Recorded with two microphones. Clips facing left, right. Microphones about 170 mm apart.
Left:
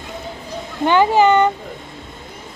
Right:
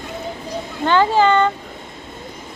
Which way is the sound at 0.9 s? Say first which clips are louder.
Left 2 dB; 15° left (ahead or behind).